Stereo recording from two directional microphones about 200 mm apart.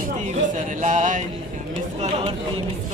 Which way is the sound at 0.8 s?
40° right (ahead or behind).